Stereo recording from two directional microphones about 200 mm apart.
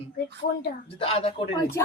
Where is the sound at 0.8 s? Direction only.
30° left (ahead or behind).